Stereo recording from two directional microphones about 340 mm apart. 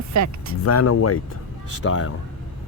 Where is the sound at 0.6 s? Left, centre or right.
Left.